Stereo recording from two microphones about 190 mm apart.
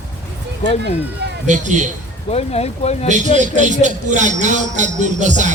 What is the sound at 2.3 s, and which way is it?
Speech, 35° left (ahead or behind).